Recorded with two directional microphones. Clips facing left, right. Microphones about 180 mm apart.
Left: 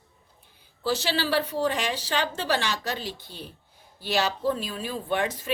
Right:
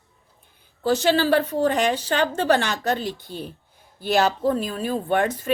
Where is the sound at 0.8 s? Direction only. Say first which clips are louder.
Right 7 dB; 50° right (ahead or behind).